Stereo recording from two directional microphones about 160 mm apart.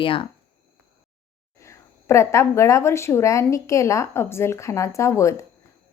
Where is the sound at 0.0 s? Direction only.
35° left (ahead or behind).